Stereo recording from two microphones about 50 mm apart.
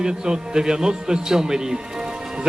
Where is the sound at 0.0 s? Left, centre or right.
Centre.